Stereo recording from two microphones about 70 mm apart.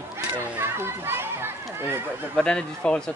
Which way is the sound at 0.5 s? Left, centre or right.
Right.